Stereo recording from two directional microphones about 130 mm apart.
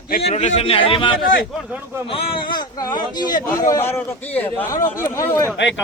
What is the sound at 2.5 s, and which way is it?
A man's voice, 35° left (ahead or behind).